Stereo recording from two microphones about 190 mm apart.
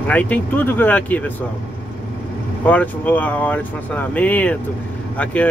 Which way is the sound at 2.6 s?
10° left (ahead or behind).